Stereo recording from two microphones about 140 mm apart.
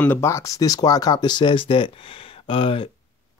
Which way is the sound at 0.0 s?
15° left (ahead or behind).